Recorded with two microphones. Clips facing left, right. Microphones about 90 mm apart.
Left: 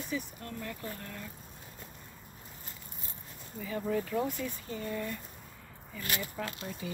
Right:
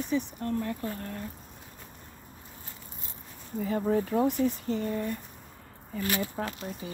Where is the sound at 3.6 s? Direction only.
40° right (ahead or behind).